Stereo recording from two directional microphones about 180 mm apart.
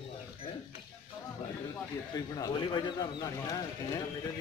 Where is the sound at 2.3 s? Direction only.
25° left (ahead or behind).